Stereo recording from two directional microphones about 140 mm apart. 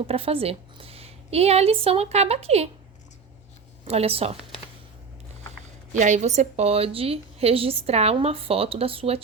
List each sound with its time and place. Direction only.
0.1 s a woman's voice: 45° right (ahead or behind)
3.8 s a woman's voice: 45° right (ahead or behind)
5.9 s a woman's voice: 60° right (ahead or behind); by 9.2 s 40° right (ahead or behind)